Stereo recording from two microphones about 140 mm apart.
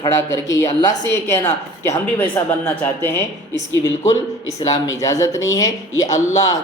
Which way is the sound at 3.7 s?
25° left (ahead or behind).